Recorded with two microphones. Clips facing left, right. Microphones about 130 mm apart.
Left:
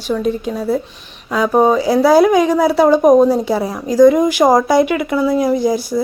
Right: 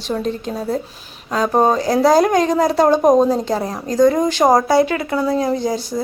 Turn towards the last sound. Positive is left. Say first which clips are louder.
# left 4 dB
turn(degrees=10)  # may be behind; listen again after turning